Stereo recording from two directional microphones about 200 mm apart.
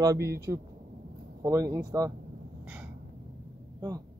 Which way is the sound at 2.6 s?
10° right (ahead or behind).